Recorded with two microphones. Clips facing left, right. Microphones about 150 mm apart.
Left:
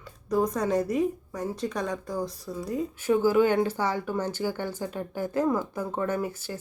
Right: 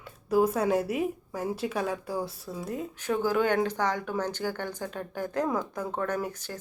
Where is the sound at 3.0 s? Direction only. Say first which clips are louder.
Left 4 dB; 10° left (ahead or behind).